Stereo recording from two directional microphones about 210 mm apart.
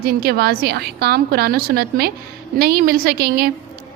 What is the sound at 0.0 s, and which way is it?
A woman's voice, 45° right (ahead or behind).